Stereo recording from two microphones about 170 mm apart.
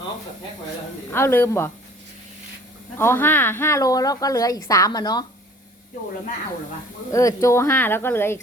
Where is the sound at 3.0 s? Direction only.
15° left (ahead or behind).